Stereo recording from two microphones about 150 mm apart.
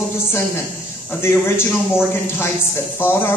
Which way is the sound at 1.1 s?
15° left (ahead or behind).